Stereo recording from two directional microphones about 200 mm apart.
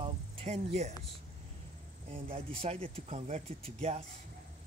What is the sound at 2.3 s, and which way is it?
Speech, 30° right (ahead or behind).